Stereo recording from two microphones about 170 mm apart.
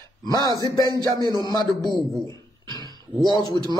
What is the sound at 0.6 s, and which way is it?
Music, 25° left (ahead or behind).